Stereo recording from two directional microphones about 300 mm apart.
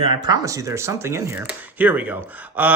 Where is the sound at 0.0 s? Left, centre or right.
Centre.